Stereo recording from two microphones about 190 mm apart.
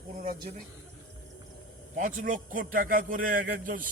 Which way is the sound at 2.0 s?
45° right (ahead or behind).